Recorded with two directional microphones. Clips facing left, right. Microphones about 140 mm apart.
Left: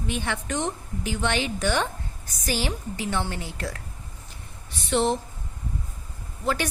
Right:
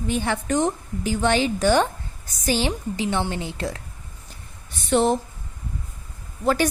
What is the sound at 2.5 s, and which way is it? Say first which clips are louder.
A woman's voice: right 5 dB; 25° right (ahead or behind).